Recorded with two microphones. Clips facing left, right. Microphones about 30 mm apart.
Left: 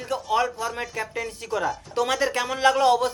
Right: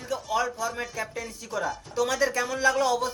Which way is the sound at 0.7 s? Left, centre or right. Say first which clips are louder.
Left 2 dB; left.